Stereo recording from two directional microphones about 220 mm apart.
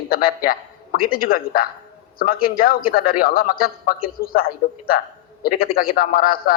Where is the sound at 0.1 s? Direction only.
40° left (ahead or behind).